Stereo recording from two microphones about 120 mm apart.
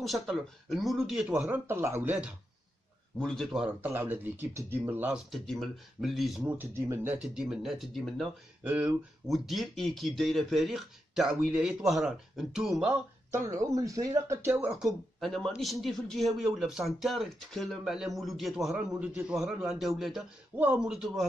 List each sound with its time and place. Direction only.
0.0 s speech: centre (ahead or behind)
1.5 s speech: 20° right (ahead or behind)
3.2 s speech: 5° left (ahead or behind)
3.6 s speech: 15° right (ahead or behind)
5.3 s speech: centre (ahead or behind)
6.4 s speech: 20° right (ahead or behind)
7.2 s speech: 5° right (ahead or behind)
8.6 s speech: 15° right (ahead or behind)
9.3 s speech: centre (ahead or behind)
13.3 s speech: 25° right (ahead or behind)
14.7 s speech: centre (ahead or behind)
20.5 s speech: 10° right (ahead or behind)